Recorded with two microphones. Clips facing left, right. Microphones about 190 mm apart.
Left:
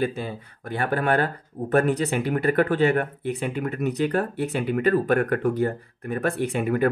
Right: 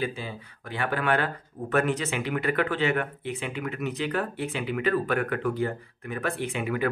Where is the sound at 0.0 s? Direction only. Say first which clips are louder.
Left 5 dB; 50° left (ahead or behind).